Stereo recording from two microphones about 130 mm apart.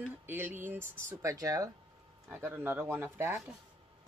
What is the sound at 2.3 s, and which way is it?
Speech, 15° right (ahead or behind).